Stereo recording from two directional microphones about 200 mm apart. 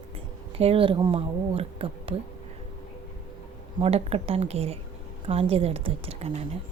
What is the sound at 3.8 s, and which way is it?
A woman's voice, 30° right (ahead or behind).